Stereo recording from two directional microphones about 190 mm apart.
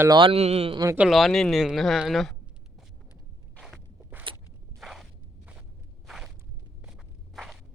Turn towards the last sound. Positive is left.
turn(degrees=0)  # may be behind; listen again after turning